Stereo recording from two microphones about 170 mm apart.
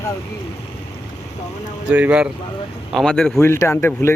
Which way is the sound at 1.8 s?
5° right (ahead or behind).